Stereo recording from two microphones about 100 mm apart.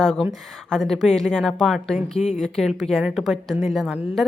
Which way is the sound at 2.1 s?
90° left.